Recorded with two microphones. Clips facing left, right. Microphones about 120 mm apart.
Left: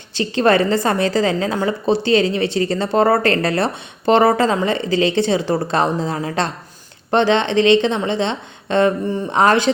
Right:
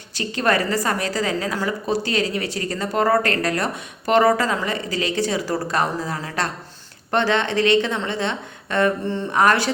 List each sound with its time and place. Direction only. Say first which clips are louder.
0.1 s a woman's voice: left 6 dB; 25° left (ahead or behind)